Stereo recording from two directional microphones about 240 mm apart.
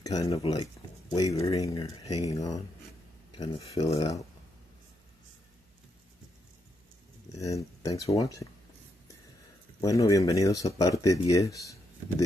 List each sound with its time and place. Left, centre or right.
0.0 s speech: centre
7.3 s speech: centre
9.8 s speech: centre